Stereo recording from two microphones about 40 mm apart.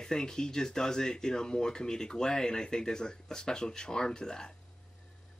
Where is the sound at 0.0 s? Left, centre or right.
Centre.